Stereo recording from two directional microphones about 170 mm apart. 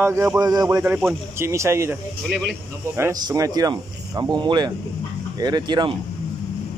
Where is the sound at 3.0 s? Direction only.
20° right (ahead or behind).